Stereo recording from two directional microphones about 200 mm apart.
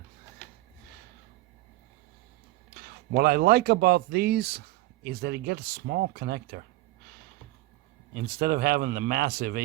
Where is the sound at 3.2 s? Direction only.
50° right (ahead or behind).